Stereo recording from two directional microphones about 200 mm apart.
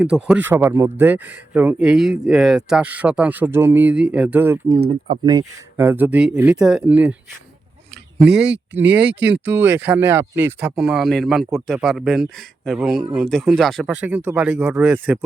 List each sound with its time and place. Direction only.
0.0 s speech: 5° right (ahead or behind)
5.0 s speech: 20° right (ahead or behind); by 7.2 s 5° right (ahead or behind)
8.3 s speech: 5° right (ahead or behind)
9.0 s speech: 60° right (ahead or behind)
9.4 s speech: 10° right (ahead or behind)